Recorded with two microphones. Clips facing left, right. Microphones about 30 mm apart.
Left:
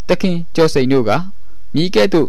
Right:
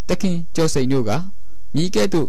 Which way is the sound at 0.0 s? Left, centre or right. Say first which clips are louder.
Left 6 dB; left.